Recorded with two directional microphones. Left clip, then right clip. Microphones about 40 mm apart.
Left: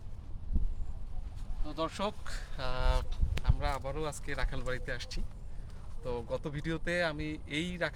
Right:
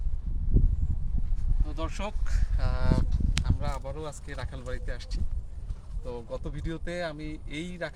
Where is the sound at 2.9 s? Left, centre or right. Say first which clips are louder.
Right 5 dB; left.